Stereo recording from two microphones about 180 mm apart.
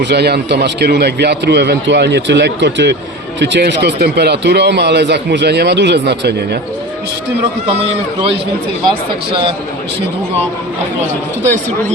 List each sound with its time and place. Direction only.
0.0 s speech: 65° right (ahead or behind)
8.9 s speech: 30° right (ahead or behind)